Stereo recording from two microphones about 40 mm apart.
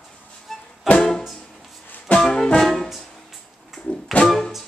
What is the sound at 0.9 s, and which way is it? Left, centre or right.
Music, centre.